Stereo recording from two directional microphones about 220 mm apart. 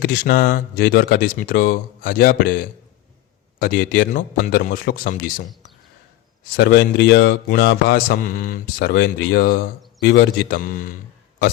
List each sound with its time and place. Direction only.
0.0 s speech: 45° left (ahead or behind)
6.6 s speech: 50° left (ahead or behind)